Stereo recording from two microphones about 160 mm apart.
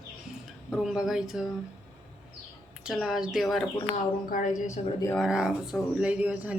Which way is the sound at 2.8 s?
Centre (ahead or behind).